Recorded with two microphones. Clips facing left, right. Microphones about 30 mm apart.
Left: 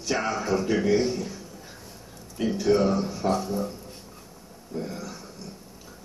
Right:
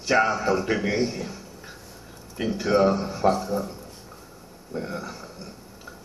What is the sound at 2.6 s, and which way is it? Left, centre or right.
Speech, right.